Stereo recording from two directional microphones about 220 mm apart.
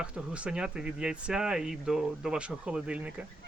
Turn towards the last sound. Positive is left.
turn(degrees=-5)  # may be behind; listen again after turning